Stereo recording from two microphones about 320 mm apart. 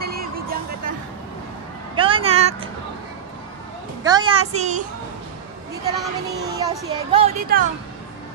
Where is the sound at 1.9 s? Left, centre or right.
Centre.